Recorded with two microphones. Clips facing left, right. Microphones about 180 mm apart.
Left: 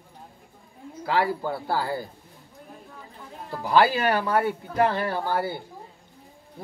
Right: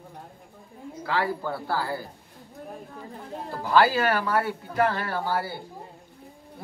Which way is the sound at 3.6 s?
20° left (ahead or behind).